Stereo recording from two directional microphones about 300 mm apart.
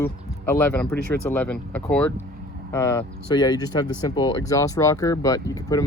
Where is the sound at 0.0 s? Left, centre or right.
Centre.